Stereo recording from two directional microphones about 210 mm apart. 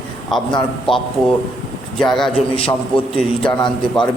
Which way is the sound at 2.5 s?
25° left (ahead or behind).